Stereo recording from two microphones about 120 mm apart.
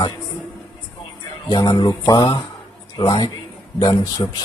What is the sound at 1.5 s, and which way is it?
A man's voice, 40° left (ahead or behind).